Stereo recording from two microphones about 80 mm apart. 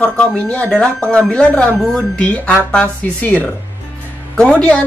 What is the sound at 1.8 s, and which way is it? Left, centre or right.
Speech, centre.